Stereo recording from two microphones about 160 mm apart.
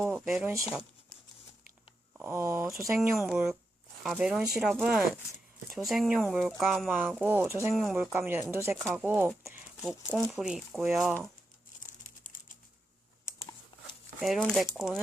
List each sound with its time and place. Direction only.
0.3 s speech: 5° right (ahead or behind)
2.1 s speech: 15° right (ahead or behind)
4.0 s speech: 5° right (ahead or behind)
7.7 s speech: centre (ahead or behind)
8.1 s speech: 15° right (ahead or behind)
9.8 s speech: centre (ahead or behind)
12.2 s typing: 55° left (ahead or behind)
14.2 s speech: centre (ahead or behind)